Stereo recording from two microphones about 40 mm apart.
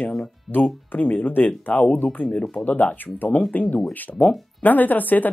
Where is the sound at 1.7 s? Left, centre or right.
Left.